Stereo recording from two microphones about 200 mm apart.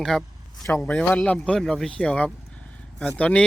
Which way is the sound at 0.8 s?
5° left (ahead or behind).